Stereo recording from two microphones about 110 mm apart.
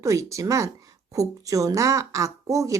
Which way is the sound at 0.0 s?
30° right (ahead or behind).